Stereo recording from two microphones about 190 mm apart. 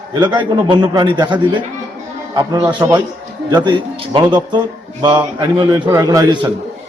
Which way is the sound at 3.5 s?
25° right (ahead or behind).